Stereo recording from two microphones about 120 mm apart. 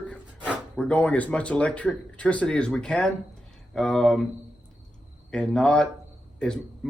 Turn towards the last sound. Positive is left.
turn(degrees=5)  # may be behind; listen again after turning